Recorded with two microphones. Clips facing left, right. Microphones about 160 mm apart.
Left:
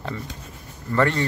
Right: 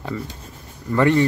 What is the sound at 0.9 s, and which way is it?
Speech, 15° right (ahead or behind).